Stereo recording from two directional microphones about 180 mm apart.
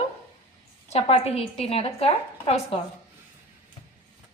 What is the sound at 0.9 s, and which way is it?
A woman's voice, 35° left (ahead or behind).